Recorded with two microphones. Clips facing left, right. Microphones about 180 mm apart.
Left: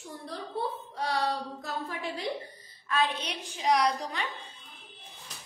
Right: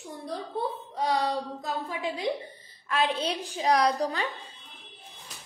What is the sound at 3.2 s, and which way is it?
A woman's voice, 35° right (ahead or behind).